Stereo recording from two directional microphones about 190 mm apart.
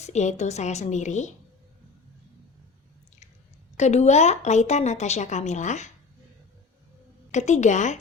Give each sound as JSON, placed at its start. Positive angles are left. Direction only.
{"t": 0.0, "sound": "speech", "side_deg": 35}
{"t": 3.8, "sound": "speech", "side_deg": 35}
{"t": 7.3, "sound": "speech", "side_deg": 40}